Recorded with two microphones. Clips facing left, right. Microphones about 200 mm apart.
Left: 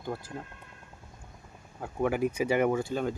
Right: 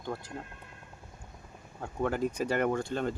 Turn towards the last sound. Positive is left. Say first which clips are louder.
# left 2 dB
turn(degrees=5)  # may be behind; listen again after turning